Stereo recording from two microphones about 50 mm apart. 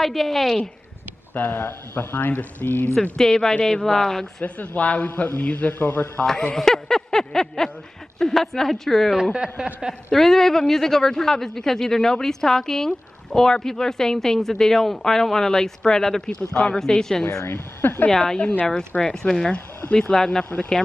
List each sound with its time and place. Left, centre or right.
0.0 s a woman's voice: centre
1.3 s a man's voice: left
2.9 s speech: centre
4.4 s a man's voice: left
6.2 s speech: centre
9.1 s speech: centre
10.1 s speech: centre
17.5 s speech: left
18.1 s speech: centre